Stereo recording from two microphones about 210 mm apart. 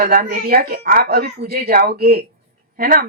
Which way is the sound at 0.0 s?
45° right (ahead or behind).